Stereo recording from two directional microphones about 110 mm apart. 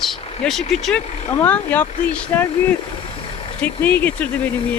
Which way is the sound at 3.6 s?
15° left (ahead or behind).